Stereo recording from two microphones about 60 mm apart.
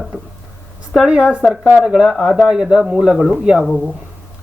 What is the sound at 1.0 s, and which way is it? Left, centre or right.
A man's voice, centre.